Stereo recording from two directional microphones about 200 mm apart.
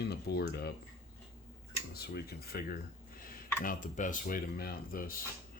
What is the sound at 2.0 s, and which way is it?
Speech, 50° left (ahead or behind).